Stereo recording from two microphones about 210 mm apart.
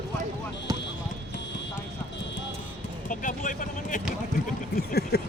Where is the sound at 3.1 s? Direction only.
40° left (ahead or behind).